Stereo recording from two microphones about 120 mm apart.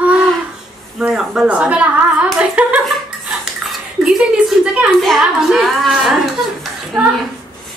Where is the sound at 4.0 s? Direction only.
5° right (ahead or behind).